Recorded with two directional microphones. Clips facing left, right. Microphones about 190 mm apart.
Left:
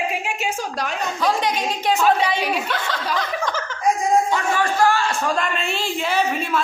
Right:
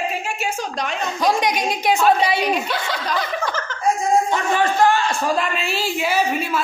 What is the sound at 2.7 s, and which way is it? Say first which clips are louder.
Chuckle: right 1 dB; 10° right (ahead or behind).